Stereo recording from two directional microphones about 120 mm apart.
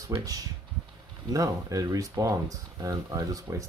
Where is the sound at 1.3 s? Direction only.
30° right (ahead or behind).